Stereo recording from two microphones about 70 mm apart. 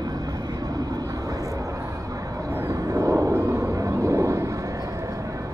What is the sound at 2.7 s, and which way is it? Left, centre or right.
Vehicle, right.